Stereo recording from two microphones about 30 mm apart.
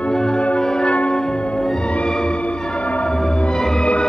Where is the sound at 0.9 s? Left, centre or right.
Left.